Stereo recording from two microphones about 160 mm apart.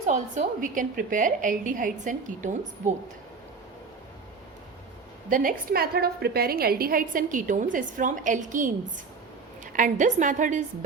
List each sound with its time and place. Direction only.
0.0 s a woman's voice: 50° right (ahead or behind)
5.3 s a woman's voice: 60° right (ahead or behind)
9.7 s a woman's voice: 55° right (ahead or behind)